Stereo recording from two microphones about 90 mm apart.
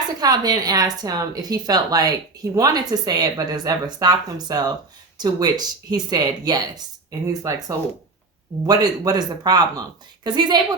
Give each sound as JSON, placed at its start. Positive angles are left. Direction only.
{"t": 0.2, "sound": "a woman's voice", "side_deg": -45}